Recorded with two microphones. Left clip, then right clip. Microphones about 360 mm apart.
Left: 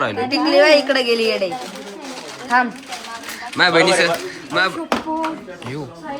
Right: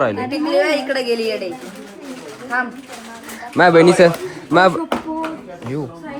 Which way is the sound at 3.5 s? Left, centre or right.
Centre.